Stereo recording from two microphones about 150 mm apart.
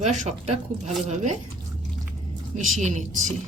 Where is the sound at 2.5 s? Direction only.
55° right (ahead or behind).